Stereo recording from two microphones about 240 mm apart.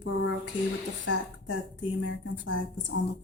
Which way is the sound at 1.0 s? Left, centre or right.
Left.